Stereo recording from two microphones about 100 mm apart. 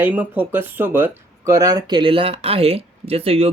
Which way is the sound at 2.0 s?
60° right (ahead or behind).